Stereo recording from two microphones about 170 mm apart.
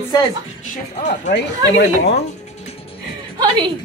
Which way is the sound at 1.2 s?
90° left.